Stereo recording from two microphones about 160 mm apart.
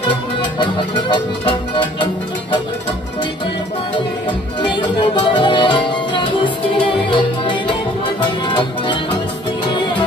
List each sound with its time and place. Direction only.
0.4 s music: 30° left (ahead or behind)
4.6 s music: 30° left (ahead or behind)